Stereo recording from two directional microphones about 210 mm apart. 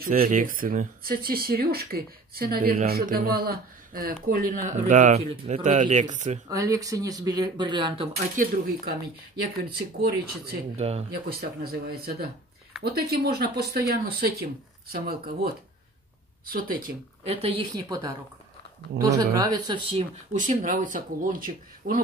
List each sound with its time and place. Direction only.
0.0 s speech: 45° right (ahead or behind)
6.5 s speech: 15° right (ahead or behind)
8.1 s speech: 45° right (ahead or behind)
10.8 s a woman's voice: 30° right (ahead or behind)
11.2 s speech: 45° right (ahead or behind)
17.3 s a woman's voice: 25° right (ahead or behind); by 22.0 s 40° right (ahead or behind)